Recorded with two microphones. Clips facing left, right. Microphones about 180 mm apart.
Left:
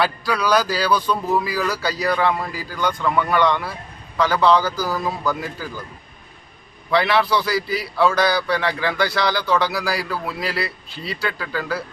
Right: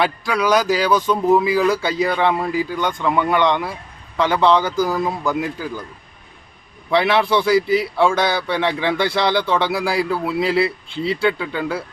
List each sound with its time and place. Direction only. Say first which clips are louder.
0.0 s speech: right 2 dB; 20° right (ahead or behind)
6.9 s speech: right 2 dB; 25° right (ahead or behind)